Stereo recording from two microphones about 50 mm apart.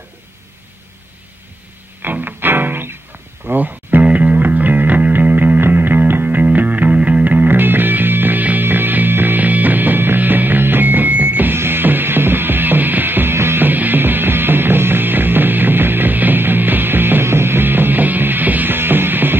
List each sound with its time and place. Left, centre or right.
2.0 s music: right
13.7 s music: right